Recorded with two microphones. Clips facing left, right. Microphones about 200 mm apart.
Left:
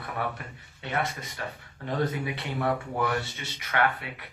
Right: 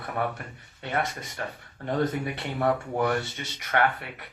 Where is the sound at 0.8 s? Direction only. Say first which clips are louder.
Right 1 dB; 55° right (ahead or behind).